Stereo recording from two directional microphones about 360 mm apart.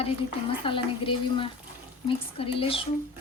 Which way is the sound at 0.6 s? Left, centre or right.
Centre.